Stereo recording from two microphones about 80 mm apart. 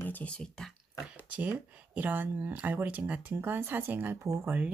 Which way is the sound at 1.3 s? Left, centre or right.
Centre.